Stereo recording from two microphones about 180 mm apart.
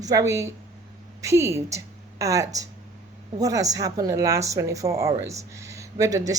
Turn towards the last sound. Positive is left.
turn(degrees=-20)  # may be behind; listen again after turning